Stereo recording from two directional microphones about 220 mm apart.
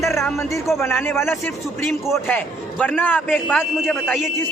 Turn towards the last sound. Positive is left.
turn(degrees=5)  # may be behind; listen again after turning